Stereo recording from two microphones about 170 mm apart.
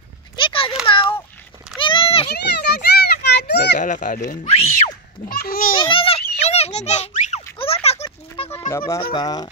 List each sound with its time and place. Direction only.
0.4 s a sound: 30° left (ahead or behind)
2.2 s children playing: 75° left (ahead or behind)
3.8 s speech: 50° left (ahead or behind)
5.3 s speech: 60° left (ahead or behind)
5.8 s a sound: 30° left (ahead or behind)
8.5 s speech: 20° left (ahead or behind)
9.1 s goose: 25° left (ahead or behind)